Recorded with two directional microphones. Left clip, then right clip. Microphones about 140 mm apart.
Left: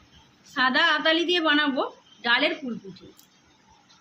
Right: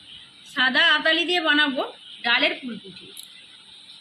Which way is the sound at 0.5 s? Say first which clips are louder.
Right 3 dB; 40° left (ahead or behind).